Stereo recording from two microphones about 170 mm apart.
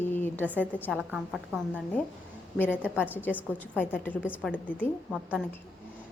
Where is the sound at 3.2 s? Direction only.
10° left (ahead or behind).